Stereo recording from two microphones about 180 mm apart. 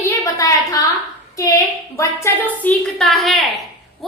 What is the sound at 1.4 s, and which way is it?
A woman's voice, 15° left (ahead or behind).